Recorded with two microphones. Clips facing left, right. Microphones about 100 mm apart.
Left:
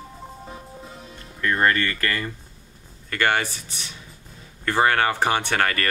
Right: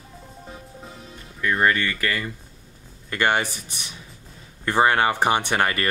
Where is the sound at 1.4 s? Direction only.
10° right (ahead or behind).